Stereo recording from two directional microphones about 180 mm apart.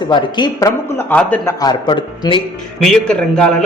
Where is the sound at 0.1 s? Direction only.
25° left (ahead or behind).